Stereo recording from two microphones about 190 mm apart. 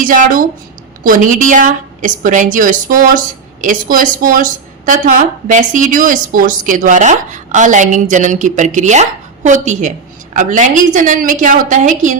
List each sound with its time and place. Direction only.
0.0 s a woman's voice: 45° right (ahead or behind)